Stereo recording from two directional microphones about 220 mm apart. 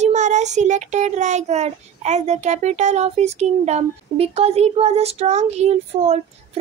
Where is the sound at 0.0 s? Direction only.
30° right (ahead or behind).